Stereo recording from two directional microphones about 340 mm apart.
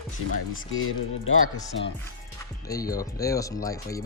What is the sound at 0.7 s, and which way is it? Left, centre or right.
Speech, left.